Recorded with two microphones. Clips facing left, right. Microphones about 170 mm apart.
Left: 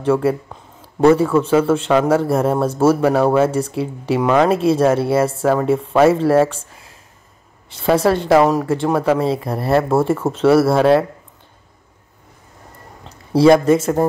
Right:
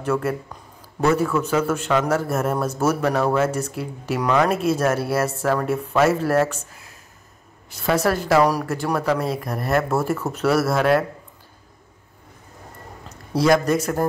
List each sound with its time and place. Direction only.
0.0 s a man's voice: 30° left (ahead or behind)
13.0 s speech: 30° left (ahead or behind)